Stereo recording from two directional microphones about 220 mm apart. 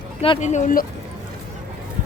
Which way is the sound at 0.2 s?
30° left (ahead or behind).